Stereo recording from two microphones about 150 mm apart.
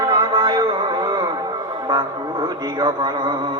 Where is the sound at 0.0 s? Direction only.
30° right (ahead or behind).